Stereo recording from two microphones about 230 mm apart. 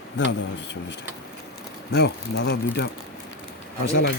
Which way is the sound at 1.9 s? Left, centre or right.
Left.